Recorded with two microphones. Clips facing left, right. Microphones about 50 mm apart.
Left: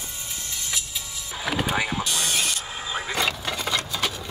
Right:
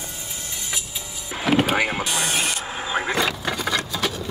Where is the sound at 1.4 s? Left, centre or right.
Right.